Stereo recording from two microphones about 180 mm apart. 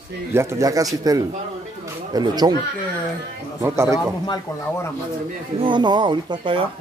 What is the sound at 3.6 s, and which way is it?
Speech, 15° right (ahead or behind).